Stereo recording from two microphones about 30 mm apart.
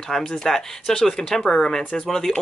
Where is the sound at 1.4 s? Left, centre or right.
Left.